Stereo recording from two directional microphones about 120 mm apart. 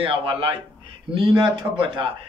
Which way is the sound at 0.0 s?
50° right (ahead or behind).